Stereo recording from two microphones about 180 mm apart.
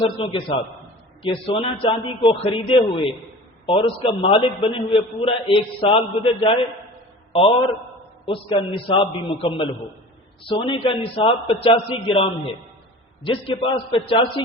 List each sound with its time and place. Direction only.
0.0 s a man's voice: 30° left (ahead or behind)
8.3 s a man's voice: 30° left (ahead or behind)
13.2 s a man's voice: 30° left (ahead or behind)